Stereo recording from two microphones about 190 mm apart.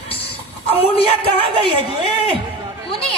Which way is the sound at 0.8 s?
30° left (ahead or behind).